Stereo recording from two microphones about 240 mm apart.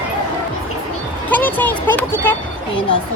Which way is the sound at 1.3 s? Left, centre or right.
Centre.